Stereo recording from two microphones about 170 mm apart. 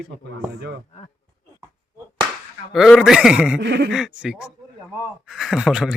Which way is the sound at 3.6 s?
80° right.